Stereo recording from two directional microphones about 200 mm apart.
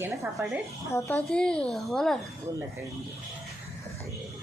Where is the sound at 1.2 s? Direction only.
5° left (ahead or behind).